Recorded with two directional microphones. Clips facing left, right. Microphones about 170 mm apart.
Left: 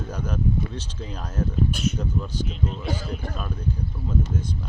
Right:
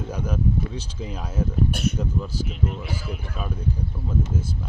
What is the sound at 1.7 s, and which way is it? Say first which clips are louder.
Speech: right 1 dB; 60° right (ahead or behind).